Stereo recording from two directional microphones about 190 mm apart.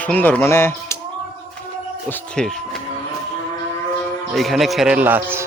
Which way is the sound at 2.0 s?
5° left (ahead or behind).